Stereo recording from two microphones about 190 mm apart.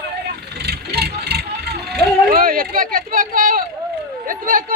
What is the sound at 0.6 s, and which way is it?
Vehicle, 55° right (ahead or behind).